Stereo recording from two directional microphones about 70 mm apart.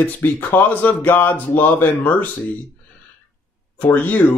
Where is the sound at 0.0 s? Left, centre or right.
Left.